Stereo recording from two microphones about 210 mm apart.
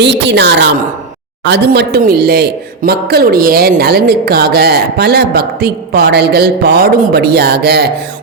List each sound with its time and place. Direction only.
0.0 s a woman's voice: 55° right (ahead or behind)